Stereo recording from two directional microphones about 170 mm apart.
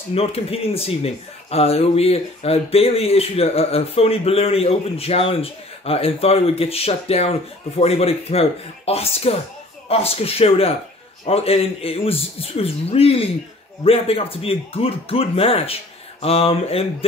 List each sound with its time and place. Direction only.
0.1 s speech: 35° left (ahead or behind)